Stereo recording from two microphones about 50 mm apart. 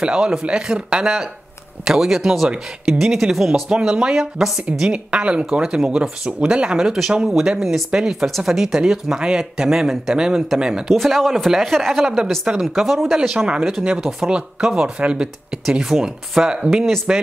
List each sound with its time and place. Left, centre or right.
0.0 s speech: centre
8.3 s speech: centre
13.5 s speech: centre
15.7 s speech: centre
16.7 s speech: centre